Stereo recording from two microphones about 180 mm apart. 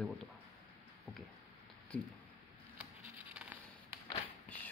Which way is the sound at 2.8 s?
5° right (ahead or behind).